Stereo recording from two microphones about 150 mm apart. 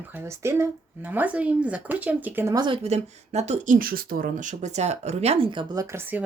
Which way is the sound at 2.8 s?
45° right (ahead or behind).